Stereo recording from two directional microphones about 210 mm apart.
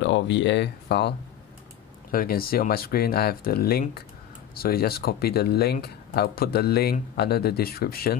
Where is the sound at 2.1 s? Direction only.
45° left (ahead or behind).